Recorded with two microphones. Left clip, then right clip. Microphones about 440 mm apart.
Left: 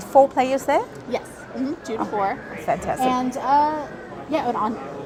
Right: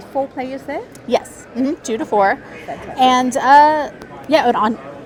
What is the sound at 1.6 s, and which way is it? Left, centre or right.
A woman's voice, right.